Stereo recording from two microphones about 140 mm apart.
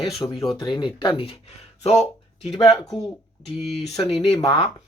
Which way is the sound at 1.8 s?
50° left (ahead or behind).